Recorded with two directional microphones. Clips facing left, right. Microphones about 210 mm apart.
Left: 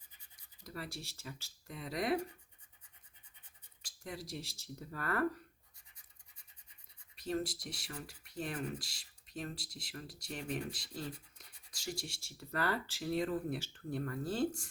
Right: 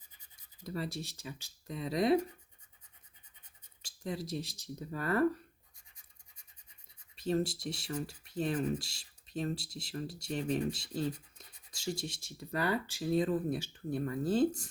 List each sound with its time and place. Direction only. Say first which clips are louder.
0.6 s speech: right 7 dB; 25° right (ahead or behind)
3.8 s speech: right 7 dB; 25° right (ahead or behind)
7.2 s speech: right 5 dB; 25° right (ahead or behind)